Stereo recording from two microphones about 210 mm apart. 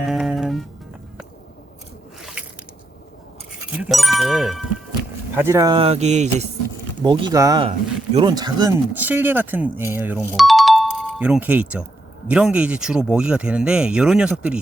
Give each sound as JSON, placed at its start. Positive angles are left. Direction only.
{"t": 0.0, "sound": "music", "side_deg": 0}
{"t": 3.8, "sound": "speech", "side_deg": 0}
{"t": 5.3, "sound": "speech", "side_deg": -10}
{"t": 5.7, "sound": "speech", "side_deg": -30}
{"t": 7.0, "sound": "speech", "side_deg": -20}
{"t": 8.9, "sound": "speech", "side_deg": -10}